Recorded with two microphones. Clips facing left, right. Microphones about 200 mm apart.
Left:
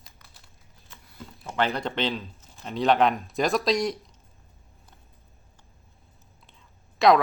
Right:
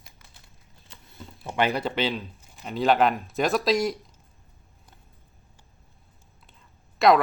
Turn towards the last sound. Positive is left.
turn(degrees=0)  # may be behind; listen again after turning